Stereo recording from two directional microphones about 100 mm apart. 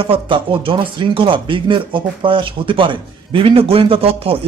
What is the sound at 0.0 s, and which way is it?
Speech, 65° right (ahead or behind).